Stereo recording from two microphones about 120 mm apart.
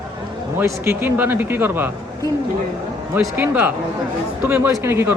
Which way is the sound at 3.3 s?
15° right (ahead or behind).